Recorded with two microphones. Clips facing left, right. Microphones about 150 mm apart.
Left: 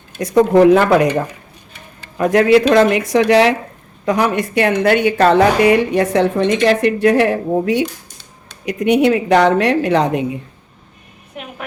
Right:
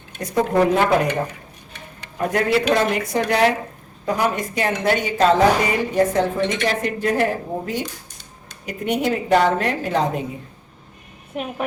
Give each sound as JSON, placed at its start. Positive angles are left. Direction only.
{"t": 0.2, "sound": "speech", "side_deg": 90}
{"t": 2.1, "sound": "speech", "side_deg": 90}
{"t": 4.0, "sound": "a woman's voice", "side_deg": 80}